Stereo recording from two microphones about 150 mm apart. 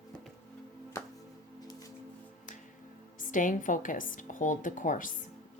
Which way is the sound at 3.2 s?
60° left (ahead or behind).